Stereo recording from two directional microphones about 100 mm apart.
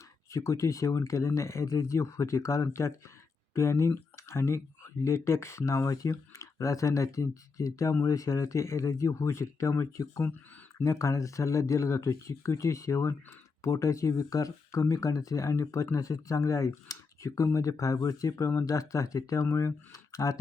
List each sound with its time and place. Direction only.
0.3 s speech: 30° left (ahead or behind)